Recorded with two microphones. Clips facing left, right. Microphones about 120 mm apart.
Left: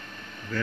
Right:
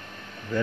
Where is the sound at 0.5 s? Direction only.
20° right (ahead or behind).